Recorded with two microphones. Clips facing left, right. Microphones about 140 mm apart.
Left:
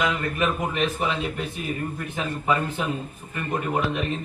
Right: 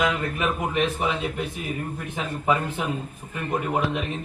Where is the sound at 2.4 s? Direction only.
15° right (ahead or behind).